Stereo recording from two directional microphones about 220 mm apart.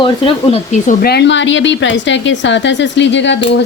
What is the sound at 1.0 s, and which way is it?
A woman's voice, 50° left (ahead or behind).